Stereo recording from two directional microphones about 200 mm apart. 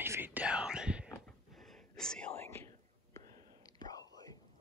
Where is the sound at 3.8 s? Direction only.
20° left (ahead or behind).